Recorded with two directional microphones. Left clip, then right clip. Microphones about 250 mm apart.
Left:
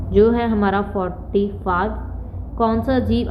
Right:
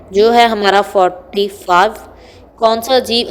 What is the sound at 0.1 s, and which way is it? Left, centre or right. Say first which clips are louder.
A woman's voice: right 7 dB; right.